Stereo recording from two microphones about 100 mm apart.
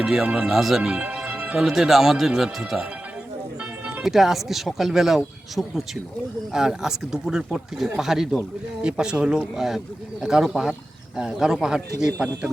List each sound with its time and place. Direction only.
0.0 s speech: 5° right (ahead or behind)
0.8 s speech: 15° right (ahead or behind)
4.0 s speech: 5° right (ahead or behind)